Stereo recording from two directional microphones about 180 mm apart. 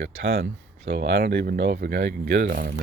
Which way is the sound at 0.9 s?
65° right (ahead or behind).